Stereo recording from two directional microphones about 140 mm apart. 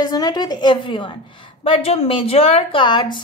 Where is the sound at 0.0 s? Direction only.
30° left (ahead or behind).